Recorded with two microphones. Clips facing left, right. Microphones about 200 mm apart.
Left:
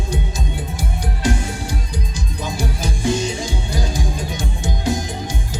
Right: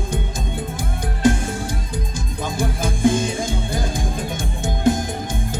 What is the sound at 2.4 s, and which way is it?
Music, 55° right (ahead or behind).